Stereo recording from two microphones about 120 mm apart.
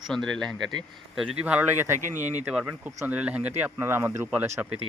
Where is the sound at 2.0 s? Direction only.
85° right.